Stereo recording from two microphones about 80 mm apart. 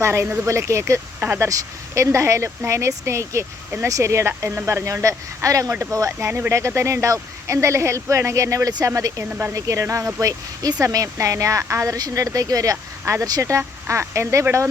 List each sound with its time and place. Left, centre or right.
0.0 s speech: right
1.2 s speech: right
1.5 s speech: right
12.7 s speech: right
13.2 s speech: right